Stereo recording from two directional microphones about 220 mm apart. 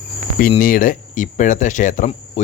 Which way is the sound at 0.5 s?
40° left (ahead or behind).